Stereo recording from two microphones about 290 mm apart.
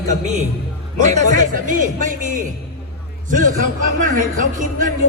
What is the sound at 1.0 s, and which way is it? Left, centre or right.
Speech, right.